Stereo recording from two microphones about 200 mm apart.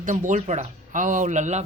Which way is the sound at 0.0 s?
40° right (ahead or behind).